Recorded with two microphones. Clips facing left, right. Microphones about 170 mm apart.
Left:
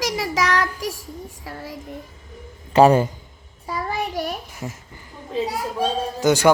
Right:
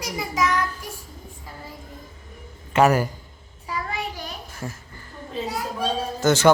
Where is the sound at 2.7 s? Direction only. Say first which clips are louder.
Left 4 dB; 30° left (ahead or behind).